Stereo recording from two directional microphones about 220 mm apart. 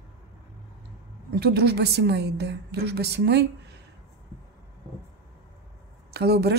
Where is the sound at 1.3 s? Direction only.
45° right (ahead or behind).